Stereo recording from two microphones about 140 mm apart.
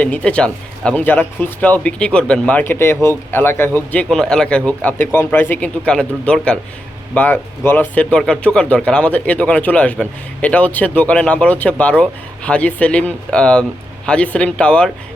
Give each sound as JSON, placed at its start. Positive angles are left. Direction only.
{"t": 0.0, "sound": "speech", "side_deg": 10}